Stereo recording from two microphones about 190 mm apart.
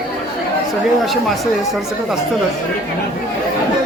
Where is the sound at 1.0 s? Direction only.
Centre (ahead or behind).